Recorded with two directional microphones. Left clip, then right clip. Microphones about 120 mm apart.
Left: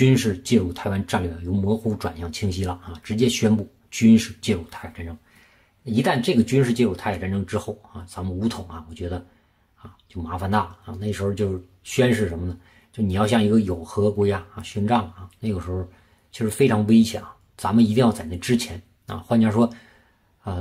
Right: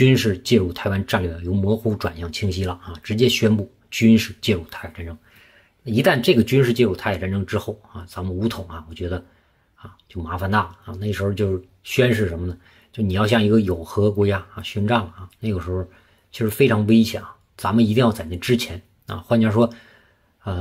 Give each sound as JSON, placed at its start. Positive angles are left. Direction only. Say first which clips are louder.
{"t": 0.0, "sound": "speech", "louder": "right 3 dB", "side_deg": -20}